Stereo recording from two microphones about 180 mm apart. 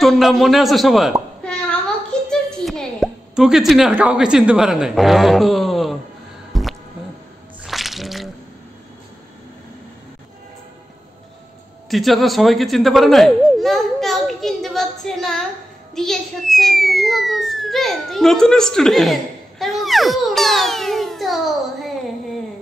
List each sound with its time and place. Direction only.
0.0 s speech: centre (ahead or behind)
1.4 s a sound: 5° left (ahead or behind)
2.5 s a woman's voice: 5° left (ahead or behind)
6.5 s music: centre (ahead or behind)
7.6 s a sound: centre (ahead or behind)
11.9 s speech: centre (ahead or behind)